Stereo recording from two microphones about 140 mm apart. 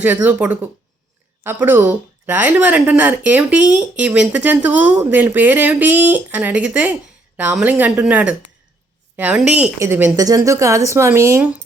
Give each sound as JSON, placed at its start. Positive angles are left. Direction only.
{"t": 0.0, "sound": "speech", "side_deg": -10}
{"t": 9.7, "sound": "speech", "side_deg": -20}